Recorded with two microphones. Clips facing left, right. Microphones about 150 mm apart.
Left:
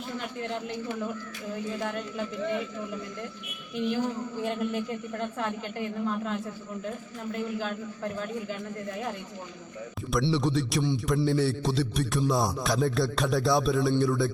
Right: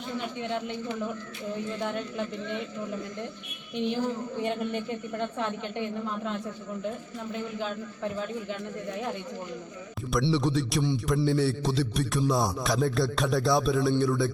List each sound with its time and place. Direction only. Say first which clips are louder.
0.2 s a man's voice: right 3 dB; centre (ahead or behind)
3.8 s a man's voice: even; 5° left (ahead or behind)
10.1 s a man's voice: even; centre (ahead or behind)